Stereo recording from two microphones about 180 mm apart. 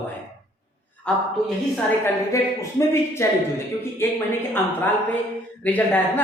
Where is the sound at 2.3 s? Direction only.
15° left (ahead or behind).